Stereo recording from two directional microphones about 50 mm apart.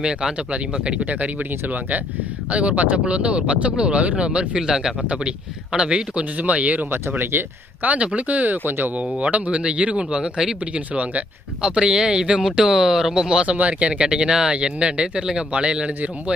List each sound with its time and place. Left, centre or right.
0.0 s a man's voice: centre
4.6 s a man's voice: centre; by 6.9 s right
6.9 s speech: right
7.8 s a man's voice: right
9.0 s a man's voice: right
10.9 s a man's voice: right
11.6 s speech: centre